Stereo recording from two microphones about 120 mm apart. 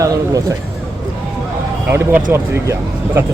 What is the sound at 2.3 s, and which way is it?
Speech, 20° right (ahead or behind).